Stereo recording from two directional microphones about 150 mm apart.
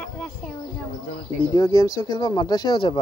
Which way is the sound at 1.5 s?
25° left (ahead or behind).